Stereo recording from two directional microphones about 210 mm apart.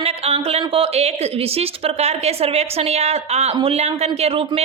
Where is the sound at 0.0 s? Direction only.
30° right (ahead or behind).